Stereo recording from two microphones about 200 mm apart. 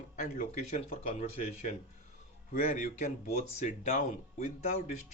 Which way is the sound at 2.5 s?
40° left (ahead or behind).